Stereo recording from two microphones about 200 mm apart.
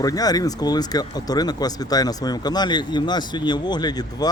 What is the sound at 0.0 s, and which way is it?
Speech, 20° left (ahead or behind).